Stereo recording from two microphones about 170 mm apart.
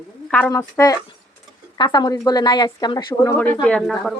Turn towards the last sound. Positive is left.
turn(degrees=0)  # may be behind; listen again after turning